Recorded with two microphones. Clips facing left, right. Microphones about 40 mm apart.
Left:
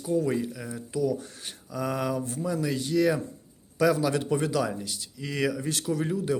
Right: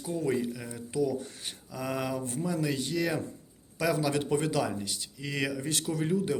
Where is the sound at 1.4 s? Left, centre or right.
Centre.